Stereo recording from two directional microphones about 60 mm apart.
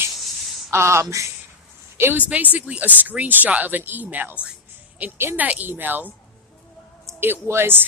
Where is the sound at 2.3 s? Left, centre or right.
Right.